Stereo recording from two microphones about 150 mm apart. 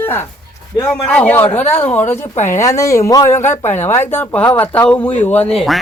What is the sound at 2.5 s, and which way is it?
Speech, 20° left (ahead or behind).